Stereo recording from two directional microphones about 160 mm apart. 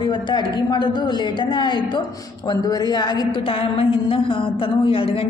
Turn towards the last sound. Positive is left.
turn(degrees=35)  # may be behind; listen again after turning